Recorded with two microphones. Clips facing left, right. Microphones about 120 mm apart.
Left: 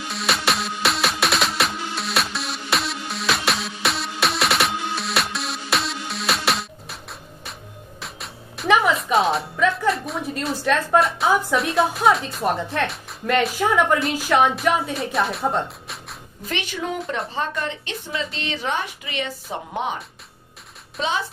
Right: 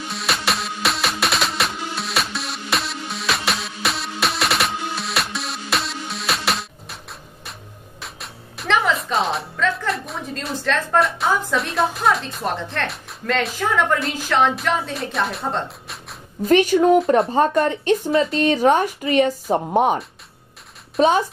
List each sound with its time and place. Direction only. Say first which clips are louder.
0.1 s music: left 1 dB; centre (ahead or behind)
8.0 s music: even; centre (ahead or behind)
10.4 s speech: left 1 dB; 10° left (ahead or behind)
13.6 s speech: left 1 dB; 10° left (ahead or behind)
16.4 s a woman's voice: right 14 dB; 45° right (ahead or behind)
21.0 s a woman's voice: right 10 dB; 45° right (ahead or behind)